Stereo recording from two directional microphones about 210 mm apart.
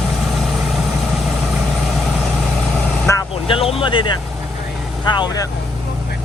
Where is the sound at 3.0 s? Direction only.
15° left (ahead or behind).